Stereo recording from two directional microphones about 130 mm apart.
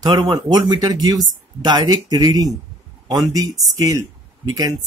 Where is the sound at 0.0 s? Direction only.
35° right (ahead or behind).